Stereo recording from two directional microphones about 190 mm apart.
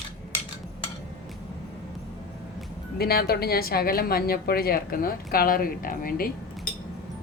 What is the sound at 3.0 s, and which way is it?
A woman's voice, 55° left (ahead or behind).